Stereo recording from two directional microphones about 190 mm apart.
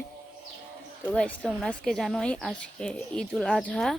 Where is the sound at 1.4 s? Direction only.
Centre (ahead or behind).